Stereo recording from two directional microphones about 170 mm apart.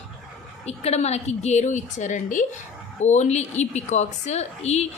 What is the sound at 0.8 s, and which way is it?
A woman's voice, 40° left (ahead or behind).